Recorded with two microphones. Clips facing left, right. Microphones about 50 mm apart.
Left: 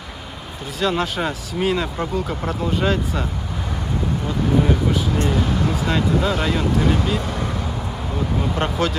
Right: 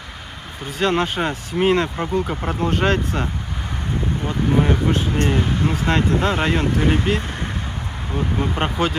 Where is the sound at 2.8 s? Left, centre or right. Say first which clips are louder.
Right 2 dB; right.